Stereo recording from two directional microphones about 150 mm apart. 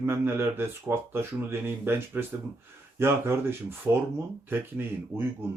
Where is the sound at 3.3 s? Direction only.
15° right (ahead or behind).